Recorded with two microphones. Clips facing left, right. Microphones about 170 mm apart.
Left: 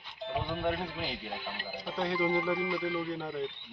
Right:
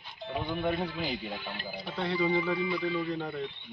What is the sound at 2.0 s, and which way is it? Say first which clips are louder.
Speech: right 1 dB; 10° left (ahead or behind).